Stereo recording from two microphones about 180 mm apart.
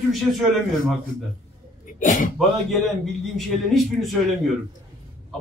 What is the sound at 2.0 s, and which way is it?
Speech, 45° left (ahead or behind).